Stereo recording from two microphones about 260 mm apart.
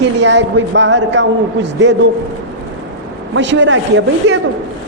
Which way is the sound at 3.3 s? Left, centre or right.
Right.